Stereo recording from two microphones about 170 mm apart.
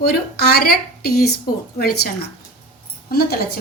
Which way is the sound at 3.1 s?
65° left (ahead or behind).